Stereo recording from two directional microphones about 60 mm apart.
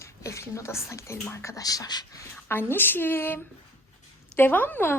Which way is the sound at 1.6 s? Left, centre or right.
Left.